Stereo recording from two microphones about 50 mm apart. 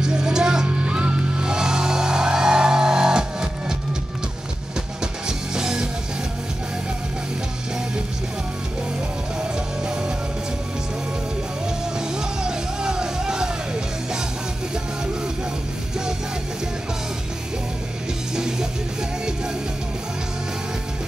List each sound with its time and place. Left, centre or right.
0.0 s music: centre
5.5 s music: centre
9.4 s music: centre
12.4 s music: centre
18.3 s music: centre